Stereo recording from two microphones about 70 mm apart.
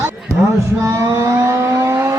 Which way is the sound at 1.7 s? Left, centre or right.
Right.